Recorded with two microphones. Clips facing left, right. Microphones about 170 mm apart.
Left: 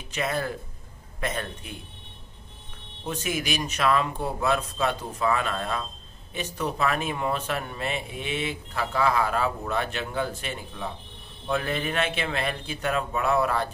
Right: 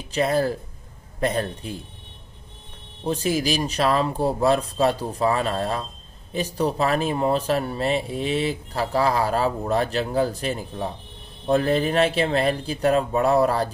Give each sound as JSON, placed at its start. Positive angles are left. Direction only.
{"t": 0.1, "sound": "speech", "side_deg": -35}
{"t": 3.0, "sound": "speech", "side_deg": -35}